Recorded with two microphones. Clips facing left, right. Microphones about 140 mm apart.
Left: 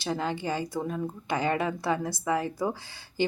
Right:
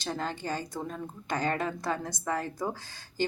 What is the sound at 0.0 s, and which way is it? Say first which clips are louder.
Speech: left 4 dB; 10° left (ahead or behind).